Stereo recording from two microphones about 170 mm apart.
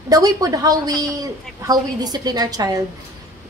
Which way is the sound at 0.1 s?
20° right (ahead or behind).